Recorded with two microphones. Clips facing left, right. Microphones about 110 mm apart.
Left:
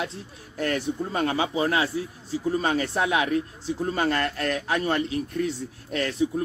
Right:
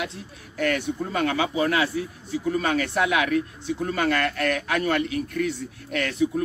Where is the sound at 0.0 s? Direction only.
30° left (ahead or behind).